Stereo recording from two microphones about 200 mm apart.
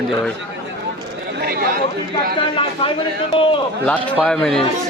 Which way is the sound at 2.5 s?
30° left (ahead or behind).